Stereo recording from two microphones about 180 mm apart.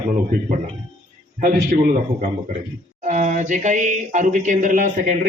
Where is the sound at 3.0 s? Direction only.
45° right (ahead or behind).